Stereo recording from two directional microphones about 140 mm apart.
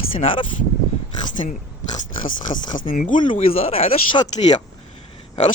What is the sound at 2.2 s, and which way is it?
Speech, 70° left (ahead or behind).